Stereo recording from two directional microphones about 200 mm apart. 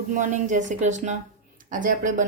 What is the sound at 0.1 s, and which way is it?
Speech, 40° right (ahead or behind).